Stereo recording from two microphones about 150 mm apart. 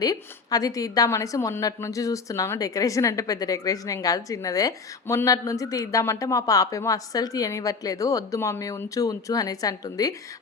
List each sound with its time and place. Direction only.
0.0 s a woman's voice: 25° left (ahead or behind)